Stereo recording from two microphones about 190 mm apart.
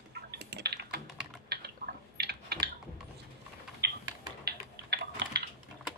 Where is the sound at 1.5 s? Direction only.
55° right (ahead or behind).